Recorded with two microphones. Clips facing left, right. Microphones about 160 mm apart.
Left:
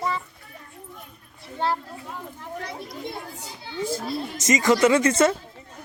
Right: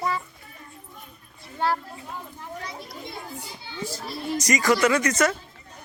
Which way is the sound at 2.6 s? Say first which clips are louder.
Left 6 dB; 60° left (ahead or behind).